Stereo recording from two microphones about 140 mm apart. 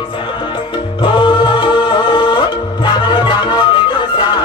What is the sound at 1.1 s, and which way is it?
Music, 35° left (ahead or behind).